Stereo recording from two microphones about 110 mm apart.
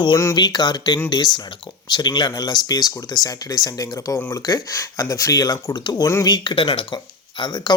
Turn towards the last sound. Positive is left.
turn(degrees=40)  # may be behind; listen again after turning